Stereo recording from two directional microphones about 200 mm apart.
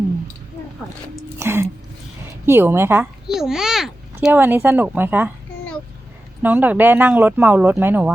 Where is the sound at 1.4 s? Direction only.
15° right (ahead or behind).